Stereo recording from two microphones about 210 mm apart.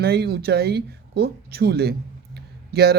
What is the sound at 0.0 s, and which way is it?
Speech, 50° right (ahead or behind).